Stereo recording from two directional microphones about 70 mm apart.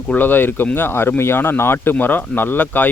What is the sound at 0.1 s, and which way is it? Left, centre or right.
Speech, left.